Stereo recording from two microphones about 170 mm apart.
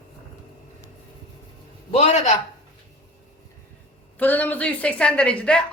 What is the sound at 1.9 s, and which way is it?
Speech, 40° left (ahead or behind).